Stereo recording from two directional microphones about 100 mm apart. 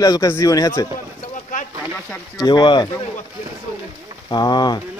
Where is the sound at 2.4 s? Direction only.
45° left (ahead or behind).